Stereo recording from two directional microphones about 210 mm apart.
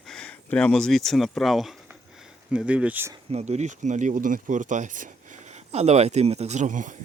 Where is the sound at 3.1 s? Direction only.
30° right (ahead or behind).